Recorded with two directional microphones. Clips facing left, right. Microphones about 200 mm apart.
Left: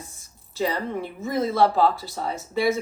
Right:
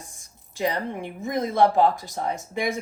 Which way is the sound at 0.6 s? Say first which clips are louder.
Left 1 dB; 15° right (ahead or behind).